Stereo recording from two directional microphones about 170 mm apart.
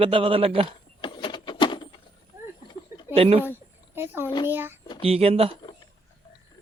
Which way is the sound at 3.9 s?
15° right (ahead or behind).